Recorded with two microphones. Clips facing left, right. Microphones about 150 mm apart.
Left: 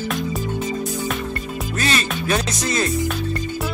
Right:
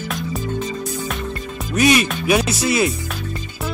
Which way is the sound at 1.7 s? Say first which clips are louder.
Right 8 dB; 15° right (ahead or behind).